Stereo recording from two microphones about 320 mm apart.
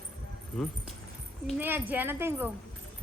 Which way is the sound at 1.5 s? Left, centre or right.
Centre.